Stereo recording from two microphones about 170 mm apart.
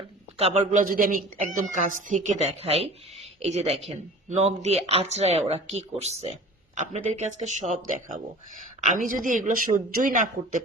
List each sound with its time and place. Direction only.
0.3 s speech: 40° right (ahead or behind)